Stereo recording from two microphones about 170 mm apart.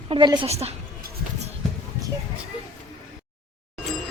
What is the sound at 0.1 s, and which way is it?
Speech, 30° right (ahead or behind).